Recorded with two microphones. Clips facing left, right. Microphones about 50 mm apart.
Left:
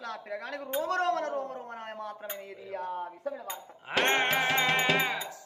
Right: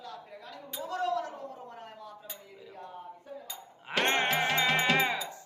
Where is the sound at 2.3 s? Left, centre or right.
Left.